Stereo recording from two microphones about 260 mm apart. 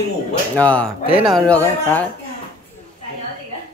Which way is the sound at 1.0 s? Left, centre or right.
Right.